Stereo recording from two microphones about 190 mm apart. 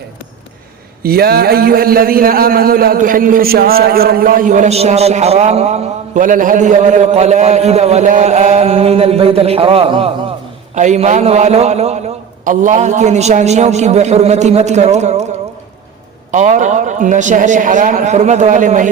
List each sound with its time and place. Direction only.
1.0 s a man's voice: 55° right (ahead or behind); by 15.3 s 35° right (ahead or behind)
16.3 s a man's voice: 40° right (ahead or behind)